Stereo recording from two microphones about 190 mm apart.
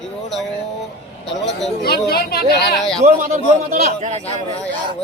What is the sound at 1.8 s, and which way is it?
A woman's voice, 55° left (ahead or behind).